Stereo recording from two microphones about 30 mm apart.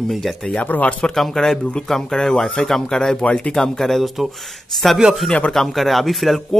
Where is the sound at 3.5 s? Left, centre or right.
Centre.